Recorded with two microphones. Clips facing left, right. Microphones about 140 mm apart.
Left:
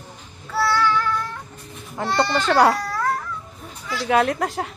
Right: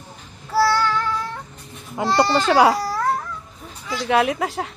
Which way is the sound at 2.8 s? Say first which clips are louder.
Right 2 dB; 30° right (ahead or behind).